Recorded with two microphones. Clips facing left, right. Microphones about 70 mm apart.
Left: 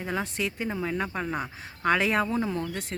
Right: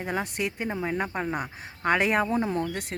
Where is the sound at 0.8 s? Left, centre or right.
Centre.